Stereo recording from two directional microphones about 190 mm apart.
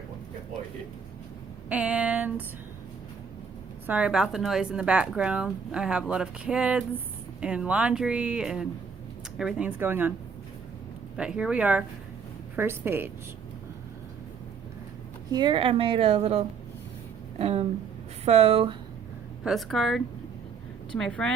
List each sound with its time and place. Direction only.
1.7 s a sound: 5° right (ahead or behind)
3.8 s speech: 5° right (ahead or behind)
11.2 s speech: 5° right (ahead or behind)
15.3 s a woman's voice: 25° right (ahead or behind)
19.5 s speech: centre (ahead or behind)